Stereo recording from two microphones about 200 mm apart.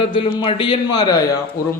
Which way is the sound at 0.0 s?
25° left (ahead or behind).